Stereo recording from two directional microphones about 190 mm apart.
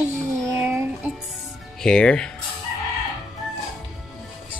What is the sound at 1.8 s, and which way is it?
Speech, 5° left (ahead or behind).